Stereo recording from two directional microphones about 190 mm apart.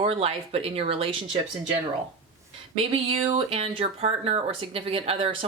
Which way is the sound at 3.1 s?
30° right (ahead or behind).